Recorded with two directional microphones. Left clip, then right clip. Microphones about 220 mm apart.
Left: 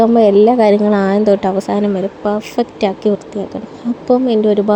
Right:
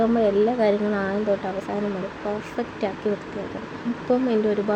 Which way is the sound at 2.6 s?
35° left (ahead or behind).